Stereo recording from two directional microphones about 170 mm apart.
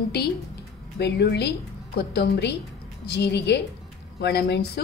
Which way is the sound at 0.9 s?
75° left (ahead or behind).